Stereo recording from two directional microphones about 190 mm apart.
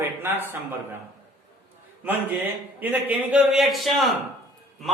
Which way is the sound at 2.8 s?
10° right (ahead or behind).